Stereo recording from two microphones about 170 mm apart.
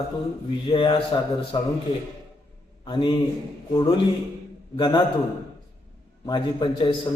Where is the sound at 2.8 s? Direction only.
30° left (ahead or behind).